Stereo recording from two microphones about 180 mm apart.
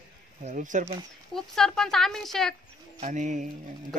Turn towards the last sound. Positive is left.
turn(degrees=-45)  # may be behind; listen again after turning